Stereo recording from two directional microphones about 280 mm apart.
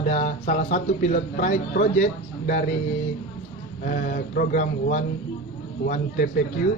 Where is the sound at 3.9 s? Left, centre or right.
Left.